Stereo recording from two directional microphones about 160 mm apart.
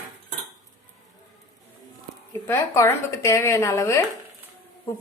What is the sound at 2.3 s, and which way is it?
Speech, 15° left (ahead or behind).